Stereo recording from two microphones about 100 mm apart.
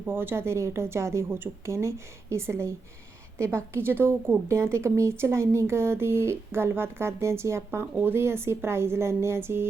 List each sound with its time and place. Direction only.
0.0 s a woman's voice: 20° right (ahead or behind)